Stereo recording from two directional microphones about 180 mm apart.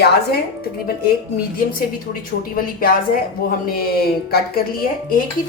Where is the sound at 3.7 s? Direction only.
55° left (ahead or behind).